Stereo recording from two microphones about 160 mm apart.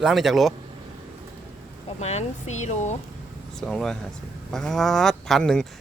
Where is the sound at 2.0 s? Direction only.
45° left (ahead or behind).